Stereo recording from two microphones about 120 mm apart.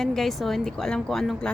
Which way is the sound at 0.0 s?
5° left (ahead or behind).